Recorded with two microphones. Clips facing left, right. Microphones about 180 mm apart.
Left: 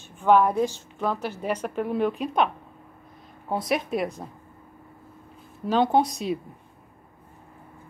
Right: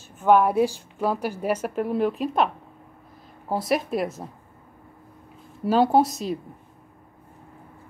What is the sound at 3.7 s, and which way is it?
Speech, centre (ahead or behind).